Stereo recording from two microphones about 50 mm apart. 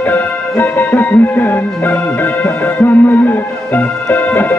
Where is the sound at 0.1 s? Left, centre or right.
Left.